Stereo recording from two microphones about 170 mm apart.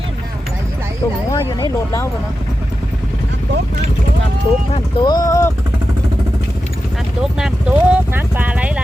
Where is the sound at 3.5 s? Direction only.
85° right.